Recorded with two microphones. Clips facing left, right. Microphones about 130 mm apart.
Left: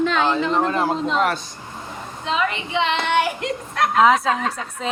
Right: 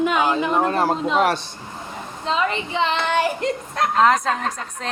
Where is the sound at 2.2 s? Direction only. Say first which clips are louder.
Right 1 dB; 35° right (ahead or behind).